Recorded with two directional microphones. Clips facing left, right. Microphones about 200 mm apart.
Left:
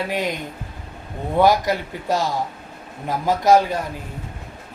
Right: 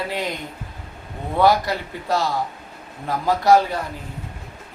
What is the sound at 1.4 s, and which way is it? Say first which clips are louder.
Speech: left 1 dB; 15° left (ahead or behind).